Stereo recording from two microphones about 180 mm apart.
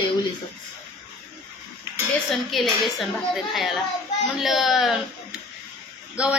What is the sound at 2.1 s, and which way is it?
A woman's voice, centre (ahead or behind).